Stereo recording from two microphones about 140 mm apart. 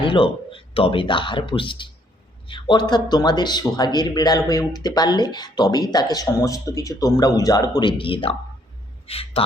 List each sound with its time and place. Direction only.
0.0 s speech: 40° left (ahead or behind)